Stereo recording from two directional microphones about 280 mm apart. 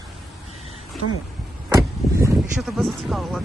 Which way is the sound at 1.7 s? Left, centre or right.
Centre.